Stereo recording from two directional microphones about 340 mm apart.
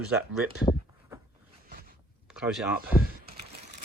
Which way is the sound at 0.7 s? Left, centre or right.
Centre.